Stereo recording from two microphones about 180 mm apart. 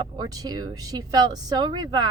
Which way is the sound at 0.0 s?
20° right (ahead or behind).